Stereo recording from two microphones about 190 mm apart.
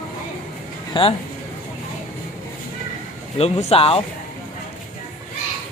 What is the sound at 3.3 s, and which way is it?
Speech, 30° left (ahead or behind).